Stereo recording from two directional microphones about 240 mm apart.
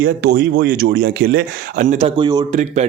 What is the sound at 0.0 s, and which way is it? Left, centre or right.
Speech, right.